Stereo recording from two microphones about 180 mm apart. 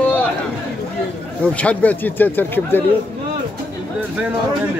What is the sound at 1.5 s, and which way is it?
Speech, 5° left (ahead or behind).